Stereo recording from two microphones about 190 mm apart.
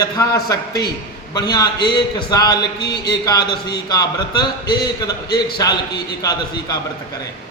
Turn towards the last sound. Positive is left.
turn(degrees=20)  # may be behind; listen again after turning